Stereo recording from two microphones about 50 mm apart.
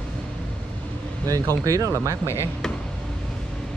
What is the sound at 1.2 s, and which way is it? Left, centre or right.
Speech, right.